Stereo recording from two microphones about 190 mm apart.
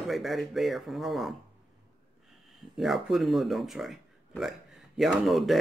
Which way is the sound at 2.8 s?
Centre (ahead or behind).